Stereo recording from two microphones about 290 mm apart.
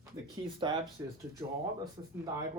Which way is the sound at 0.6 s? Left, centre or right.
Centre.